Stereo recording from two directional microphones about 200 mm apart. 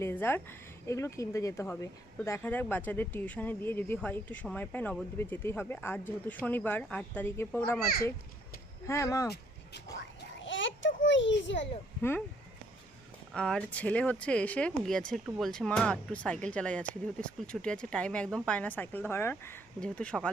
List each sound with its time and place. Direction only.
0.0 s speech: 10° left (ahead or behind)
8.9 s speech: 15° left (ahead or behind)
9.3 s a sound: 55° left (ahead or behind)
13.3 s speech: 5° left (ahead or behind)